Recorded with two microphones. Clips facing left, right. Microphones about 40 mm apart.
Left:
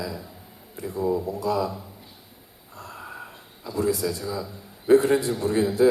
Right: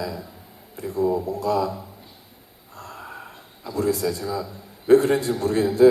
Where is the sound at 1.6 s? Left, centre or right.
Centre.